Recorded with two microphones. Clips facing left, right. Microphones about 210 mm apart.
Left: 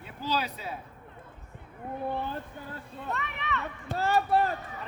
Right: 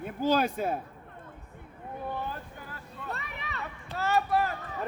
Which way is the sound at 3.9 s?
30° left (ahead or behind).